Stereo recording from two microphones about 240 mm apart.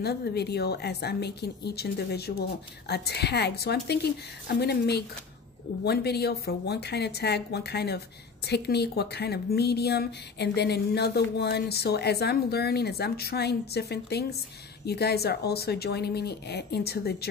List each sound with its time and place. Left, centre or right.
0.0 s speech: left